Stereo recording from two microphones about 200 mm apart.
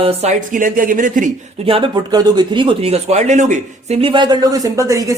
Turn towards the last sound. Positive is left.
turn(degrees=-15)  # may be behind; listen again after turning